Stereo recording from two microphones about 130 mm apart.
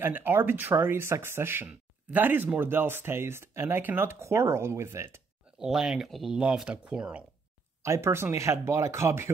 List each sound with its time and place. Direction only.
0.0 s speech: 15° right (ahead or behind)
5.6 s speech: 5° right (ahead or behind)
7.8 s speech: 20° right (ahead or behind)